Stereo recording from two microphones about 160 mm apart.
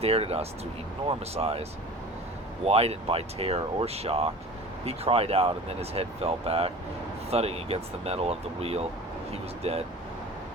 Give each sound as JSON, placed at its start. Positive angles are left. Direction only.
{"t": 0.0, "sound": "speech", "side_deg": -40}
{"t": 2.6, "sound": "speech", "side_deg": -40}